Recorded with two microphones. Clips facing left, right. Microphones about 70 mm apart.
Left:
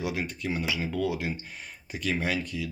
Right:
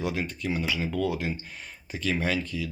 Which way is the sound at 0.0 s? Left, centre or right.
Centre.